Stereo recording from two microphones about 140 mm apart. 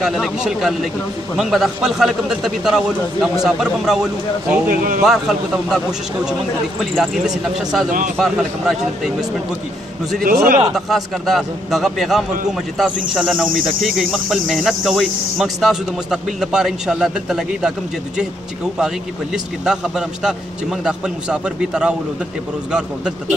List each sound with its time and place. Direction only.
0.0 s speech: 5° right (ahead or behind)
4.6 s speech: 85° right
5.0 s speech: 5° right (ahead or behind)
10.2 s speech: 90° right
10.7 s speech: centre (ahead or behind)
19.3 s speech: 5° right (ahead or behind)